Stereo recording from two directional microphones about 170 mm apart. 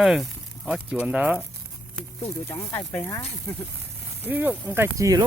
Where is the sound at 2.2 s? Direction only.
15° left (ahead or behind).